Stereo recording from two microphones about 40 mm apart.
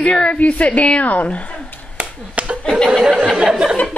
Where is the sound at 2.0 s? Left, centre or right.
Right.